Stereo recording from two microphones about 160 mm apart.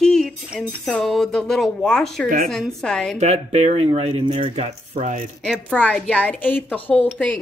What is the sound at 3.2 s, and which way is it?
Speech, 45° right (ahead or behind).